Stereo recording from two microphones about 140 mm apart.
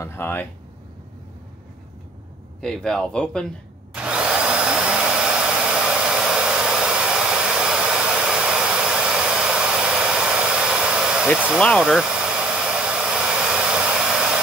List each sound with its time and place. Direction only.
0.0 s speech: 15° left (ahead or behind)
2.6 s speech: 5° left (ahead or behind)
3.9 s drill: 5° right (ahead or behind)
11.8 s hair dryer: 5° right (ahead or behind)